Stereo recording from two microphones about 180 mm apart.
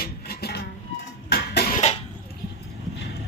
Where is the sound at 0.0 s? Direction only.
60° left (ahead or behind).